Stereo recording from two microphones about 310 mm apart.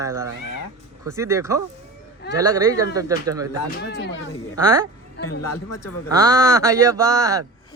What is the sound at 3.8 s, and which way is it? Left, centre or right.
Speech, left.